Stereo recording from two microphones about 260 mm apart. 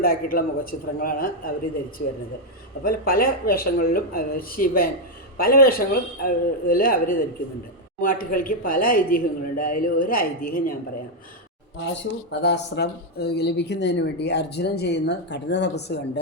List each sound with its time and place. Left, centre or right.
0.0 s speech: left
12.3 s speech: left